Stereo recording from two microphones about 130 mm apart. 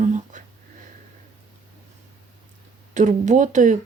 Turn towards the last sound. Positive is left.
turn(degrees=-70)  # may be behind; listen again after turning